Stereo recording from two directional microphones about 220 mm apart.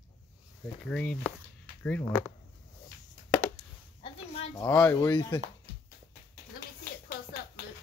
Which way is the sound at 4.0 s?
25° left (ahead or behind).